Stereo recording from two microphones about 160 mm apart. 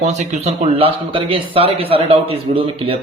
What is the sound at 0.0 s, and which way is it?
Speech, 45° right (ahead or behind).